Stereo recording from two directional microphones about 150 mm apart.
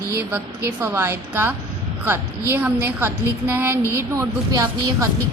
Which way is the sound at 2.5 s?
10° right (ahead or behind).